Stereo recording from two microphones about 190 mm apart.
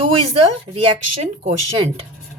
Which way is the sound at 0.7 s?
30° right (ahead or behind).